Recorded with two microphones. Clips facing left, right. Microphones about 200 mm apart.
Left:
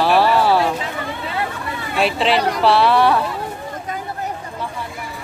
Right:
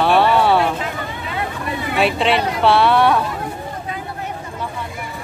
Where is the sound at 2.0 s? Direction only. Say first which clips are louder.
Even; centre (ahead or behind).